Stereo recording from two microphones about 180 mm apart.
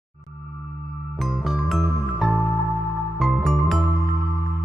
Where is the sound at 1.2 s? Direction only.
Centre (ahead or behind).